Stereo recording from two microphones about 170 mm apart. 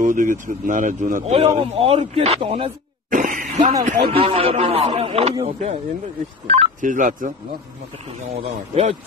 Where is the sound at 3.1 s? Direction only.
50° right (ahead or behind).